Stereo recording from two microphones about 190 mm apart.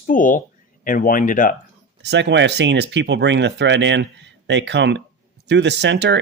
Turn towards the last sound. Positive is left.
turn(degrees=-70)  # may be behind; listen again after turning